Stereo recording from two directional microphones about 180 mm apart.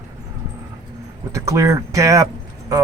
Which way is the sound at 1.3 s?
15° right (ahead or behind).